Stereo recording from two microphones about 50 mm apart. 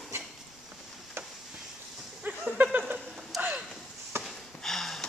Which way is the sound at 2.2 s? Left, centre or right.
Right.